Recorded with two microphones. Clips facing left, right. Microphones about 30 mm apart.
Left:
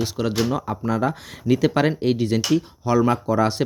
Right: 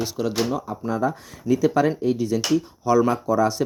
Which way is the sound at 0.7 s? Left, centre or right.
Left.